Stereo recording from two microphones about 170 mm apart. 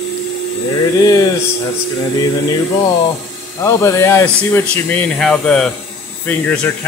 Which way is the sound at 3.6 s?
15° left (ahead or behind).